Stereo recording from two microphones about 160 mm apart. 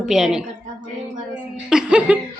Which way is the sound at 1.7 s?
5° right (ahead or behind).